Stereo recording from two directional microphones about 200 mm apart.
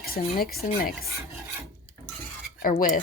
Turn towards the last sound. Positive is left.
turn(degrees=45)  # may be behind; listen again after turning